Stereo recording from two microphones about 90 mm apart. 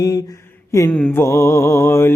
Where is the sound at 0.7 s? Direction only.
35° left (ahead or behind).